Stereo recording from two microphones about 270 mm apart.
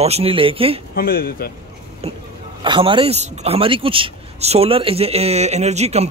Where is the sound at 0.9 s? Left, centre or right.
Left.